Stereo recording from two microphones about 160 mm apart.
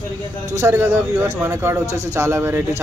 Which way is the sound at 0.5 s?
15° right (ahead or behind).